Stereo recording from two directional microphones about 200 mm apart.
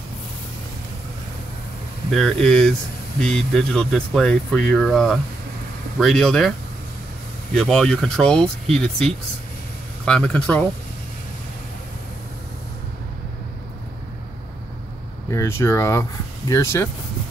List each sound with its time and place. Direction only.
2.1 s speech: 5° left (ahead or behind)
7.5 s speech: centre (ahead or behind)
15.3 s speech: 10° left (ahead or behind)